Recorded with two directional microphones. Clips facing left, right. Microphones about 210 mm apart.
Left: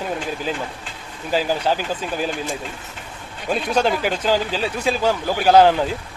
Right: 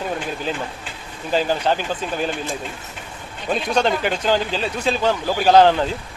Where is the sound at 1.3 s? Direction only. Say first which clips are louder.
Right 1 dB; 5° left (ahead or behind).